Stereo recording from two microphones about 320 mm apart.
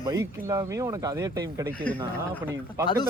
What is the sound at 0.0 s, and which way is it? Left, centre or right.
A man's voice, centre.